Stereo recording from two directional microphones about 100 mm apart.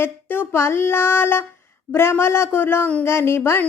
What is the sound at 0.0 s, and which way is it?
Speech, 20° left (ahead or behind).